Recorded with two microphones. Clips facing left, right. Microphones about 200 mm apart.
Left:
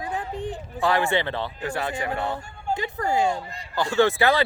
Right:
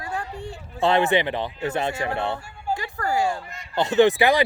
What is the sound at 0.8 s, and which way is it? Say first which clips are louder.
Speech: right 3 dB; 20° right (ahead or behind).